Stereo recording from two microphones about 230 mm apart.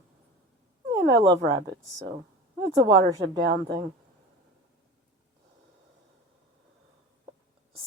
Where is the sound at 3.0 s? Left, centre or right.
Centre.